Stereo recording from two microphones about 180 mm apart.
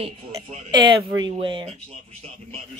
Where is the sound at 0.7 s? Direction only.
25° right (ahead or behind).